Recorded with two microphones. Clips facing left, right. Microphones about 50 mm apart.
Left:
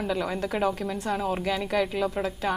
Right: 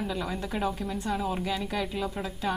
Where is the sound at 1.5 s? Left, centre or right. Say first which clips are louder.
Left 5 dB; left.